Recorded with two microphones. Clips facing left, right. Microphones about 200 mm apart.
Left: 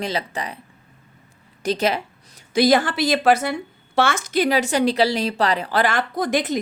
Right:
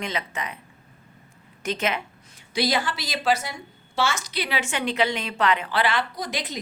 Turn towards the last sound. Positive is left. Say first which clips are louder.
# left 10 dB
turn(degrees=50)  # may be behind; listen again after turning